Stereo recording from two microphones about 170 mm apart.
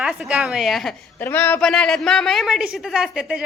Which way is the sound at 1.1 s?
15° left (ahead or behind).